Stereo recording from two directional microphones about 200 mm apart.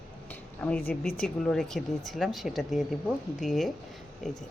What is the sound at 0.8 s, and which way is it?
Speech, 45° left (ahead or behind).